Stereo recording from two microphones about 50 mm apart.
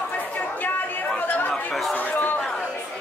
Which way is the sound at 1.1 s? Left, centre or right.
Left.